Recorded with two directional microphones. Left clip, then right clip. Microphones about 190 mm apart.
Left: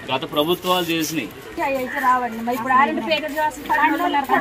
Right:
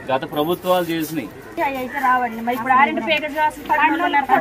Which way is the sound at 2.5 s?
5° right (ahead or behind).